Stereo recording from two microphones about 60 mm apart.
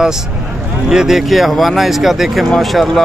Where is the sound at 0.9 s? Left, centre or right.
Centre.